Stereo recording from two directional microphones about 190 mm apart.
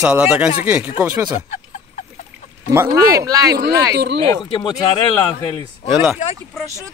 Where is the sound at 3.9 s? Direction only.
65° right (ahead or behind).